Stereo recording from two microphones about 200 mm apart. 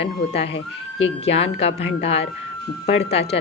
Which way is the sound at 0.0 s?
30° left (ahead or behind).